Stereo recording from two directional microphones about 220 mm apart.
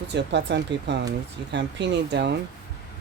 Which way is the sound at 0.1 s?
50° right (ahead or behind).